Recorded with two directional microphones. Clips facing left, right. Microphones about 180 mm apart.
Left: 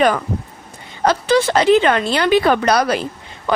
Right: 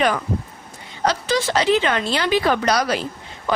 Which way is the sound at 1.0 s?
55° left (ahead or behind).